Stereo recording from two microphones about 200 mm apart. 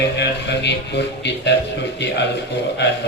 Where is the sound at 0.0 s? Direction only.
60° left (ahead or behind).